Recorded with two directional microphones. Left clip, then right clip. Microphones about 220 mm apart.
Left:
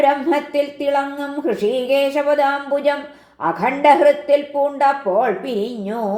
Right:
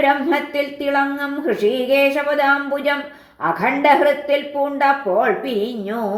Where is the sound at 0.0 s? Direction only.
30° left (ahead or behind).